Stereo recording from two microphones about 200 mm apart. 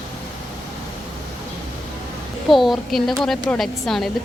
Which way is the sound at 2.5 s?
Centre (ahead or behind).